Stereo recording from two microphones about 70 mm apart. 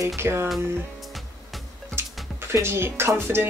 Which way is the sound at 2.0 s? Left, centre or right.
Right.